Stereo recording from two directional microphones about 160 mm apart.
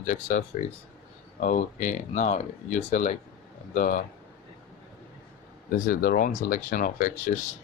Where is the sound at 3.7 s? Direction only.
55° left (ahead or behind).